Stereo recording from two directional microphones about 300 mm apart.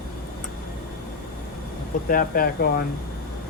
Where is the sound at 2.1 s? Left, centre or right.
Left.